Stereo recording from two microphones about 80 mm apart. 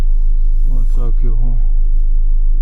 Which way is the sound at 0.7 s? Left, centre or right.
Left.